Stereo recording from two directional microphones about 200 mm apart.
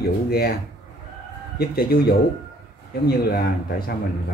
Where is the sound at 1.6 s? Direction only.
50° left (ahead or behind).